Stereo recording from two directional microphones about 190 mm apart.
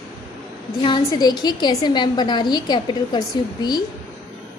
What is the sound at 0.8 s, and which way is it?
A woman's voice, 25° left (ahead or behind).